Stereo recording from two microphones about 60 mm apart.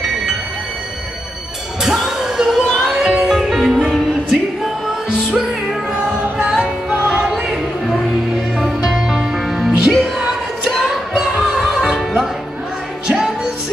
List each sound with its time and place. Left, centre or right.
1.8 s music: centre